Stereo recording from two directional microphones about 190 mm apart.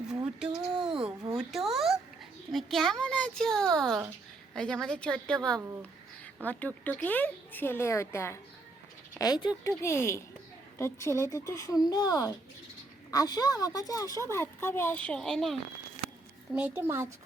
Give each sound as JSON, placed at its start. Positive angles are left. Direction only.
{"t": 0.3, "sound": "a sound", "side_deg": -5}
{"t": 2.5, "sound": "a child's voice", "side_deg": 0}
{"t": 5.5, "sound": "speech", "side_deg": -15}
{"t": 5.8, "sound": "a woman's voice", "side_deg": 5}
{"t": 16.6, "sound": "speech", "side_deg": -10}